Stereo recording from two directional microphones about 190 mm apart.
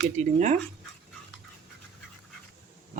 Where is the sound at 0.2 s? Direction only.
35° right (ahead or behind).